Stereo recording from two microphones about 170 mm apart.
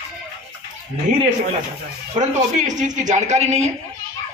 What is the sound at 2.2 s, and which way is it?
Speech, 45° right (ahead or behind).